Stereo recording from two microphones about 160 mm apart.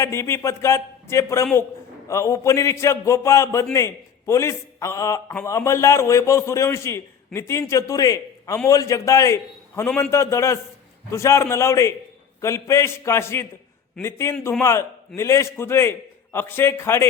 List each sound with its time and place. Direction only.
0.0 s a man's voice: 15° left (ahead or behind)